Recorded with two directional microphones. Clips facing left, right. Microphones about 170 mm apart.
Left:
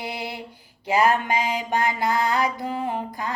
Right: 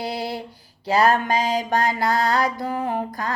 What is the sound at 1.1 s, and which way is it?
Mantra, 40° right (ahead or behind).